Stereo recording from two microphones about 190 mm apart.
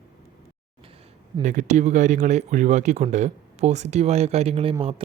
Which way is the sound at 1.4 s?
40° right (ahead or behind).